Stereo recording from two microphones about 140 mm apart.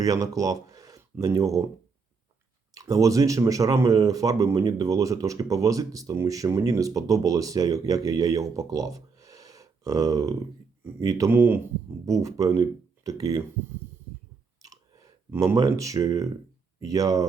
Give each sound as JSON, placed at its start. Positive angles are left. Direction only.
{"t": 0.0, "sound": "speech", "side_deg": -25}
{"t": 2.7, "sound": "speech", "side_deg": -25}
{"t": 14.6, "sound": "a sound", "side_deg": -25}
{"t": 16.8, "sound": "speech", "side_deg": -25}